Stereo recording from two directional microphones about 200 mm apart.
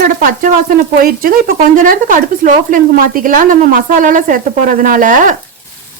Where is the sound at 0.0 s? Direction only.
45° right (ahead or behind).